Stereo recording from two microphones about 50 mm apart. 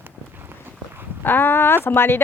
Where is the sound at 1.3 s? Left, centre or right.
Left.